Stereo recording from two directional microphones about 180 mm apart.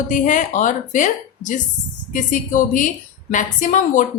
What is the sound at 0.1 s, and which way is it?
A woman's voice, 45° left (ahead or behind).